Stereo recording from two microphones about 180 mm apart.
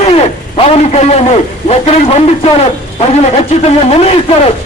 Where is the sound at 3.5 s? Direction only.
35° left (ahead or behind).